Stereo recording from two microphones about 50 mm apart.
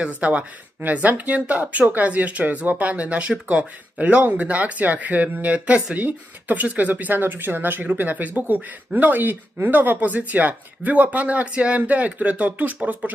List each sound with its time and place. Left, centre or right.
0.2 s speech: right